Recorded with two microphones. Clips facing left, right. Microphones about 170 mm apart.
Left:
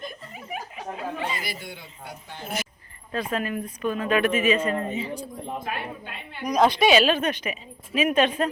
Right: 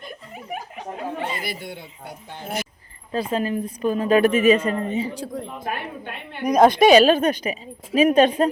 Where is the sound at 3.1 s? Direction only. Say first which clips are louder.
Right 4 dB; 30° right (ahead or behind).